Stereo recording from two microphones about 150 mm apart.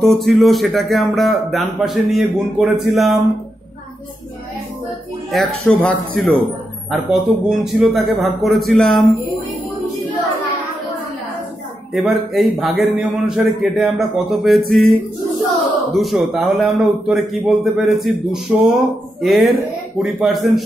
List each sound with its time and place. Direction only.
0.0 s a man's voice: centre (ahead or behind)
5.3 s a man's voice: 5° left (ahead or behind)
11.9 s a man's voice: centre (ahead or behind)
15.9 s a man's voice: centre (ahead or behind)